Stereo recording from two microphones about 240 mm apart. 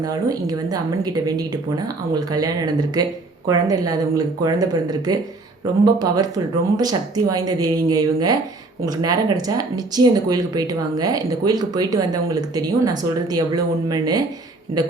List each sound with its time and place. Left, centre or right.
0.0 s speech: centre